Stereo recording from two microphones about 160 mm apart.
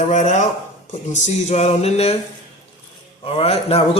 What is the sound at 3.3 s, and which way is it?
Speech, 40° left (ahead or behind).